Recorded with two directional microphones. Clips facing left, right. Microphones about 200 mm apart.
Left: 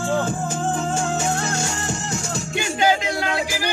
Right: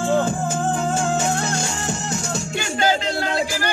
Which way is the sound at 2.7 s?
15° left (ahead or behind).